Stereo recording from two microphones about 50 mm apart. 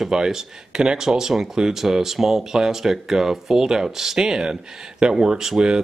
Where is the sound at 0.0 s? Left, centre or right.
Centre.